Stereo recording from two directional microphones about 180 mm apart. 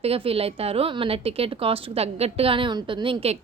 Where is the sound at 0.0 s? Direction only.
35° right (ahead or behind).